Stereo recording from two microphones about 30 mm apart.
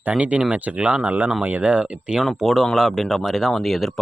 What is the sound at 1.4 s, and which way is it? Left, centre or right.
Speech, right.